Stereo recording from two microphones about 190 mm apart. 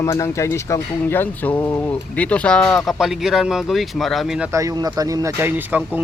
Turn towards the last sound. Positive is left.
turn(degrees=-10)  # may be behind; listen again after turning